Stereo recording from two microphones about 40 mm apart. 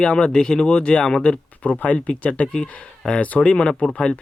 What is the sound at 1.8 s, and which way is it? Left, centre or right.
Speech, left.